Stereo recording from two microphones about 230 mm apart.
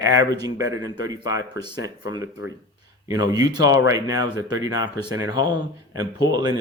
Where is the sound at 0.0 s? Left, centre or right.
Centre.